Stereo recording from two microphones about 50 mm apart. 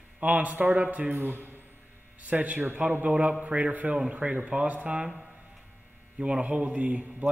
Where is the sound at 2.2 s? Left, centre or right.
Right.